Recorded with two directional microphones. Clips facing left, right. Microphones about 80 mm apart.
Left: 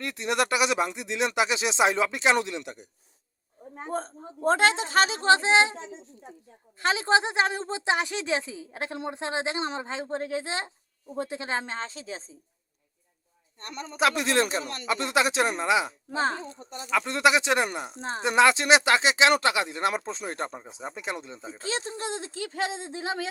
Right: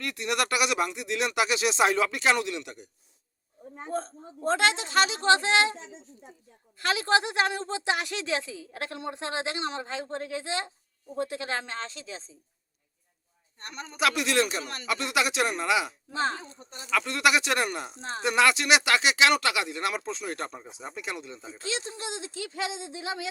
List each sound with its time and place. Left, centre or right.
0.0 s speech: left
3.9 s a woman's voice: left
4.5 s a woman's voice: left
6.7 s a woman's voice: left
13.9 s speech: left